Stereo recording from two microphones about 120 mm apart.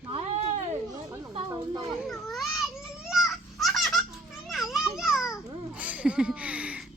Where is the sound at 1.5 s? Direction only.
35° right (ahead or behind).